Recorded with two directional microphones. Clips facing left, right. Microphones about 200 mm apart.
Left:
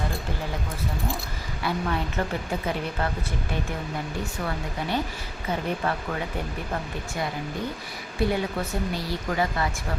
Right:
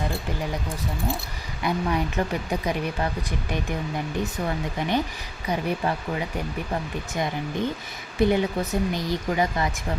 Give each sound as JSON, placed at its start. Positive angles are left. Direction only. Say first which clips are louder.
{"t": 1.6, "sound": "speech", "louder": "right 3 dB", "side_deg": -15}
{"t": 8.2, "sound": "speech", "louder": "right 4 dB", "side_deg": -20}